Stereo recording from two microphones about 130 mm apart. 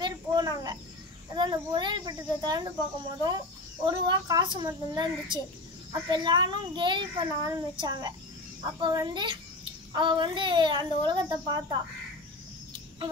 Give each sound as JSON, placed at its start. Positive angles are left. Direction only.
{"t": 0.0, "sound": "cricket", "side_deg": -30}
{"t": 1.3, "sound": "a child's voice", "side_deg": -35}
{"t": 3.8, "sound": "a child's voice", "side_deg": -35}